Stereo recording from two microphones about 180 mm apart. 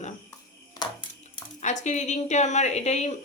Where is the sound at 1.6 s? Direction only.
40° left (ahead or behind).